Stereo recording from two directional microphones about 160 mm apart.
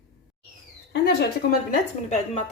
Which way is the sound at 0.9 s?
90° left.